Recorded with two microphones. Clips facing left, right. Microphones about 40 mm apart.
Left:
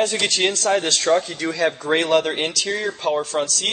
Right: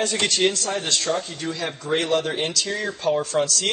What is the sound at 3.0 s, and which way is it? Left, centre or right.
Speech, left.